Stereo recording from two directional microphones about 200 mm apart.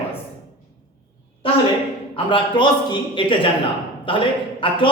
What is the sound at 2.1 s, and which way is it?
Speech, 25° left (ahead or behind).